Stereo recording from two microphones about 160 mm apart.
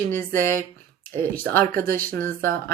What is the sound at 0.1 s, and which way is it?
Speech, 15° left (ahead or behind).